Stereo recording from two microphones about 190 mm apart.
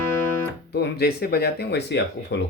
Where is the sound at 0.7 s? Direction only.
60° left (ahead or behind).